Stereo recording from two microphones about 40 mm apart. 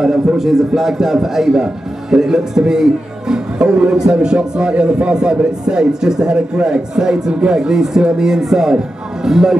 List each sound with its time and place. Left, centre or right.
0.0 s a man's voice: centre
3.6 s a man's voice: right